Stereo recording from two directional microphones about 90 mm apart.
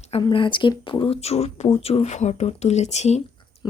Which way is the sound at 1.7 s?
90° left.